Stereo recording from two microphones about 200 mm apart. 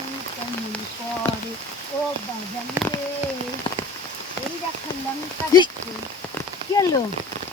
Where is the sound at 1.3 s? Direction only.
25° left (ahead or behind).